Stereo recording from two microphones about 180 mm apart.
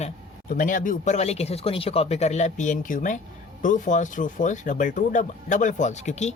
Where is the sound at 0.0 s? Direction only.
50° left (ahead or behind).